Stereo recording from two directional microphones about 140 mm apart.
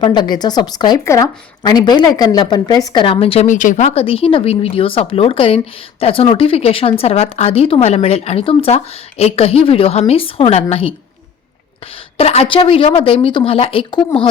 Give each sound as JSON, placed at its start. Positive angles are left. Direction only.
{"t": 0.0, "sound": "a woman's voice", "side_deg": 35}
{"t": 3.4, "sound": "speech", "side_deg": 65}
{"t": 3.8, "sound": "a woman's voice", "side_deg": 45}
{"t": 12.1, "sound": "a woman's voice", "side_deg": 45}